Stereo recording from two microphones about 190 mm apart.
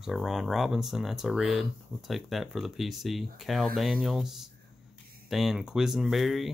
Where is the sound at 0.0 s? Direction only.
Centre (ahead or behind).